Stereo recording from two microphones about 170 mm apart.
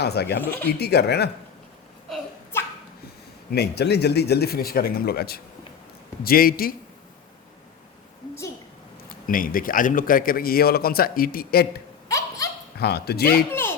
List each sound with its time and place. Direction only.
0.0 s speech: 75° left (ahead or behind)
0.4 s speech: 10° left (ahead or behind)
0.7 s speech: 70° left (ahead or behind)
2.5 s a sound: 15° left (ahead or behind)
3.5 s a man's voice: 70° left (ahead or behind)
9.2 s a man's voice: 55° left (ahead or behind)
12.0 s a sound: 20° left (ahead or behind)
12.8 s speech: 70° left (ahead or behind)
13.5 s a sound: 15° left (ahead or behind)